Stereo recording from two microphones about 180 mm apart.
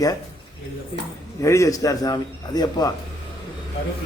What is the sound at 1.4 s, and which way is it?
A man's voice, 15° left (ahead or behind).